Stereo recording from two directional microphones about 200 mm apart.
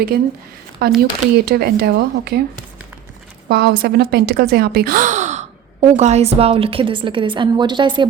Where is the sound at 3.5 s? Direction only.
55° right (ahead or behind).